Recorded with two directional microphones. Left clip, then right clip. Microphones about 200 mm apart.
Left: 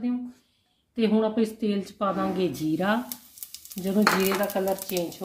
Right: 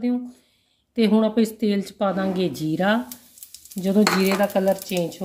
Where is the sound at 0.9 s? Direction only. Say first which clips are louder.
Right 4 dB; 35° right (ahead or behind).